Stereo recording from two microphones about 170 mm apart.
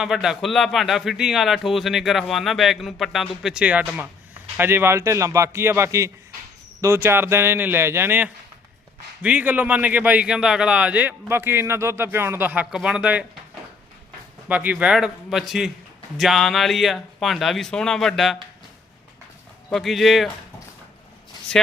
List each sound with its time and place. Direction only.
0.0 s a man's voice: 5° right (ahead or behind)
14.4 s a man's voice: 10° right (ahead or behind)
19.7 s a man's voice: centre (ahead or behind)